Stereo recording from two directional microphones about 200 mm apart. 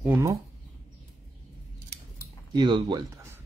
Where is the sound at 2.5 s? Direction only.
20° right (ahead or behind).